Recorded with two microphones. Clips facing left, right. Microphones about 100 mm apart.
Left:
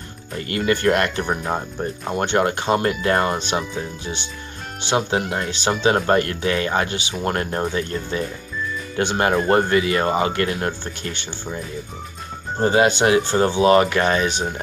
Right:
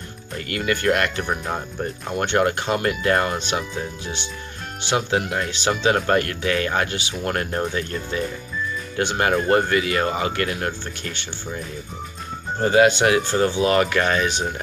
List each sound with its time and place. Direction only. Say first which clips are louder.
0.5 s speech: left 2 dB; 30° left (ahead or behind)
4.8 s speech: left 1 dB; 30° left (ahead or behind)
12.5 s speech: right 1 dB; 30° left (ahead or behind)